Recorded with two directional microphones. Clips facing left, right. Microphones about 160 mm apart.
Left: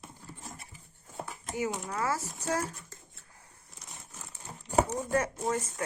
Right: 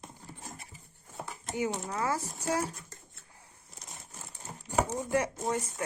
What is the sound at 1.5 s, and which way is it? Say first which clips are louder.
A woman's voice: even; 25° right (ahead or behind).